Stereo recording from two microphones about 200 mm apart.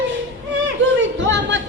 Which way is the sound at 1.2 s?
65° right (ahead or behind).